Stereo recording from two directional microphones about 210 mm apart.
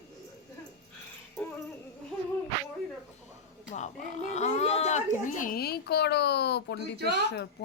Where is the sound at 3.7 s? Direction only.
35° left (ahead or behind); by 6.8 s 55° left (ahead or behind).